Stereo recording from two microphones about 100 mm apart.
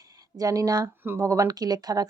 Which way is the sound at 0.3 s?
35° right (ahead or behind).